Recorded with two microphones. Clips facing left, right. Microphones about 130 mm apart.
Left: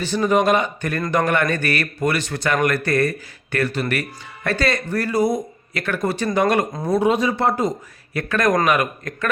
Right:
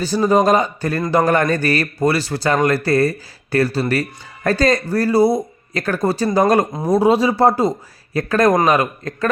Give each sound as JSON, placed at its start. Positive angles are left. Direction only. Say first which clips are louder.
{"t": 0.0, "sound": "speech", "louder": "right 3 dB", "side_deg": -35}